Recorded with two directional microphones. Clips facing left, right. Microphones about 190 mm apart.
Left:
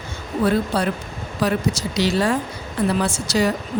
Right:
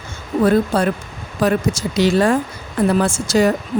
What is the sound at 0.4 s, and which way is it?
Speech, 50° right (ahead or behind).